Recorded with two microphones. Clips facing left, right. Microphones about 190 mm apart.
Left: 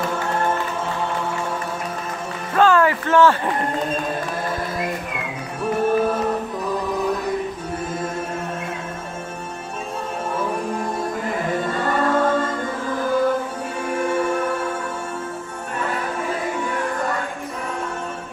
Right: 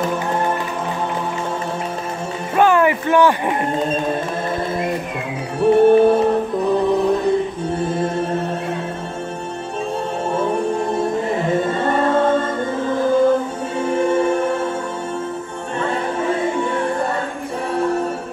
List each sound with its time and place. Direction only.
2.5 s speech: 15° right (ahead or behind)
5.6 s music: 30° right (ahead or behind)
11.0 s music: 25° right (ahead or behind)
15.8 s music: 25° right (ahead or behind)